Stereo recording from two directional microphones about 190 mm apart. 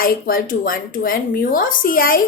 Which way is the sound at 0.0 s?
45° left (ahead or behind).